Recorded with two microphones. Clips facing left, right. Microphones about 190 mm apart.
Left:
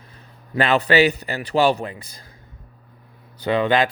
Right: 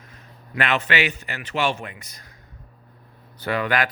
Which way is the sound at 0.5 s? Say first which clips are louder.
Left 6 dB; 35° left (ahead or behind).